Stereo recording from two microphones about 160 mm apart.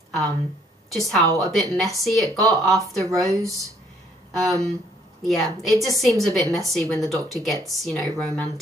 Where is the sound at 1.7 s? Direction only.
Centre (ahead or behind).